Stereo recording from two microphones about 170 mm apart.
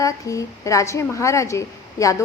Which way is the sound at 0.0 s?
20° left (ahead or behind).